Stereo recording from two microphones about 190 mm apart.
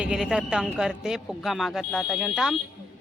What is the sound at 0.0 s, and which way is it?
A man's voice, 5° right (ahead or behind).